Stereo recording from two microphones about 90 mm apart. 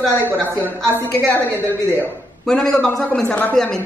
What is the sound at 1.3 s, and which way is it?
Speech, 20° left (ahead or behind).